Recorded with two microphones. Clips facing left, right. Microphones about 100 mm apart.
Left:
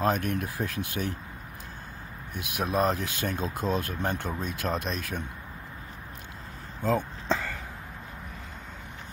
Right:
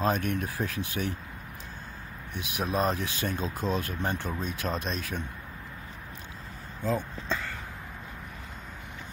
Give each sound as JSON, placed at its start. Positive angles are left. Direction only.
{"t": 0.0, "sound": "speech", "side_deg": 45}
{"t": 2.3, "sound": "speech", "side_deg": 45}
{"t": 6.8, "sound": "speech", "side_deg": 70}